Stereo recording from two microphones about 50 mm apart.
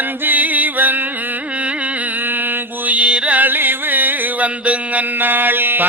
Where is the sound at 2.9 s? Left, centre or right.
Right.